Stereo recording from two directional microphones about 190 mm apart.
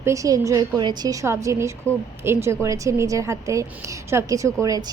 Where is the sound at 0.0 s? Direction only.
15° right (ahead or behind).